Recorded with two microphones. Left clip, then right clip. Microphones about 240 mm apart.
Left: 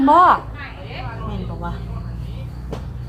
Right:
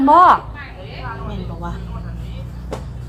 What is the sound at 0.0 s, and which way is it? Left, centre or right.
Speech, centre.